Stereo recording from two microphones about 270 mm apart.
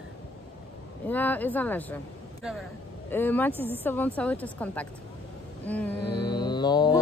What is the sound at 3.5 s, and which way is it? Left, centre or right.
Speech, centre.